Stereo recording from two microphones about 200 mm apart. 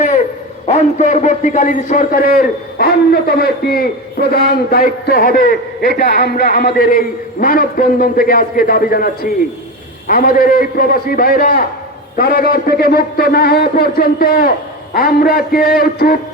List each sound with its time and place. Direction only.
0.7 s a man's voice: 35° left (ahead or behind)
6.1 s a man's voice: 55° left (ahead or behind)